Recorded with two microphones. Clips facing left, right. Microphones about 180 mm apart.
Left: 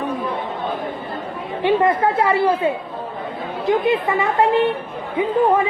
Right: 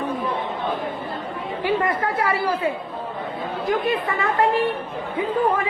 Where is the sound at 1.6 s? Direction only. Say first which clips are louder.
Left 6 dB; 25° left (ahead or behind).